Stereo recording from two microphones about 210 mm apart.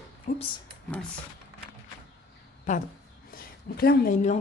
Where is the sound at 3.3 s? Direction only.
45° left (ahead or behind).